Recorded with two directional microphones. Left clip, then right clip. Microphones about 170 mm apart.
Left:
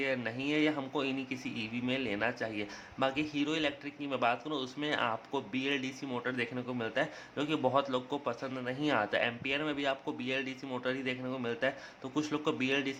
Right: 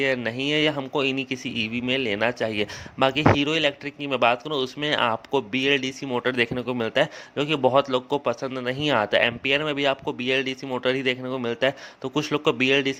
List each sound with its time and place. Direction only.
0.0 s a man's voice: 45° right (ahead or behind)